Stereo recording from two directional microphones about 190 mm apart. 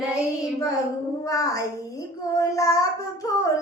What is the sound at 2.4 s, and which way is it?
Child singing, 15° left (ahead or behind).